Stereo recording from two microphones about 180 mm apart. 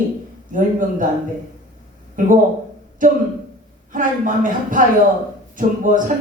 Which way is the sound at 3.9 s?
45° right (ahead or behind).